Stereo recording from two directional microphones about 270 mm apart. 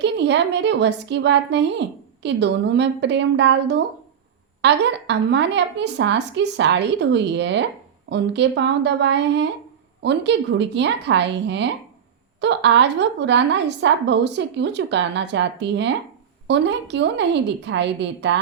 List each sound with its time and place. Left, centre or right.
0.0 s a woman's voice: right